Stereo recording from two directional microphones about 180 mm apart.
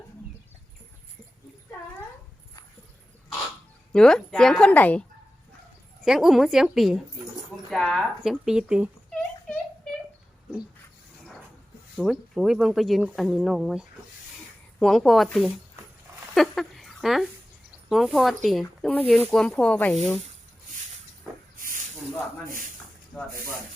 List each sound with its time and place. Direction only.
3.9 s speech: 5° left (ahead or behind)
6.1 s speech: centre (ahead or behind)
11.9 s speech: centre (ahead or behind)
16.3 s a sound: centre (ahead or behind)
17.8 s speech: centre (ahead or behind)
21.6 s snake: 45° right (ahead or behind)